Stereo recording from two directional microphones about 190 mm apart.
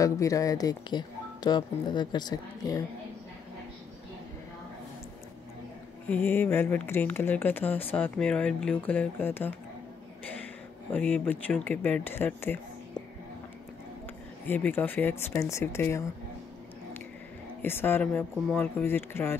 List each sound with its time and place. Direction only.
0.0 s speech: 15° left (ahead or behind)
6.0 s speech: 10° left (ahead or behind)
14.5 s speech: 10° left (ahead or behind)
17.6 s speech: 10° left (ahead or behind)